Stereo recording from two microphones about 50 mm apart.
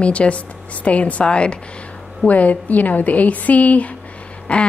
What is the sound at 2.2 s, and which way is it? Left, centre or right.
A woman's voice, left.